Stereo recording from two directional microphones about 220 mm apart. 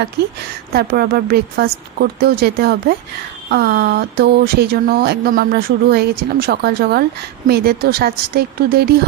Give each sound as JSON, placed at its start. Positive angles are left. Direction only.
{"t": 0.7, "sound": "speech", "side_deg": -45}